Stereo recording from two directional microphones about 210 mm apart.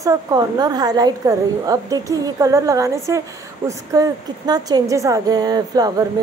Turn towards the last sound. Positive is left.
turn(degrees=-20)  # may be behind; listen again after turning